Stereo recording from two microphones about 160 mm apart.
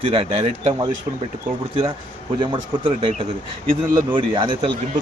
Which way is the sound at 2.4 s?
30° right (ahead or behind).